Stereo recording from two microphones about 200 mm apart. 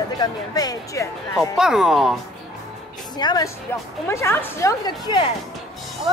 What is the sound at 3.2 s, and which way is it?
A woman's voice, 20° left (ahead or behind).